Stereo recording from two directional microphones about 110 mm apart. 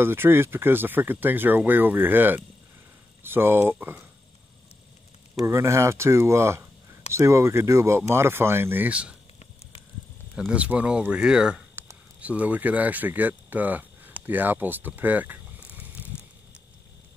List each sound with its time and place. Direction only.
0.0 s speech: 20° right (ahead or behind)
5.4 s speech: 25° right (ahead or behind)
10.5 s speech: 10° right (ahead or behind)